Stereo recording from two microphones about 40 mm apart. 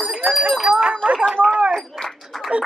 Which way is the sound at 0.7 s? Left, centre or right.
Right.